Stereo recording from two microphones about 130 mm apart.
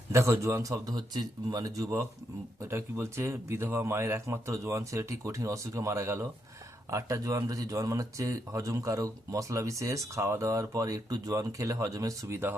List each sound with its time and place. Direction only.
0.1 s speech: 20° right (ahead or behind)